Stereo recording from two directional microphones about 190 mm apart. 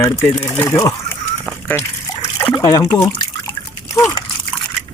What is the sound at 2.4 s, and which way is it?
Water, 15° left (ahead or behind).